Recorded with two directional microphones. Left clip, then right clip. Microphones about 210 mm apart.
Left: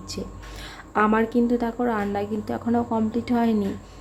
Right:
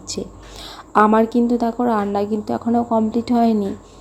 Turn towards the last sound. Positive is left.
turn(degrees=-15)  # may be behind; listen again after turning